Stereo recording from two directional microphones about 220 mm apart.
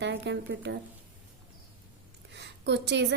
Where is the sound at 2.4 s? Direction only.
50° right (ahead or behind).